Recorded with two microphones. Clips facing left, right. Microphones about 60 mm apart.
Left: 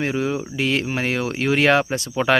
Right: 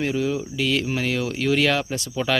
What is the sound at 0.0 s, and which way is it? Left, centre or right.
Speech, left.